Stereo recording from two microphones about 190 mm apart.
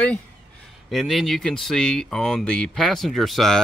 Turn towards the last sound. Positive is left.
turn(degrees=0)  # may be behind; listen again after turning